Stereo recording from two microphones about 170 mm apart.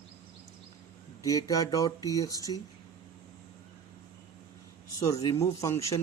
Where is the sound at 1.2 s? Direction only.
20° left (ahead or behind).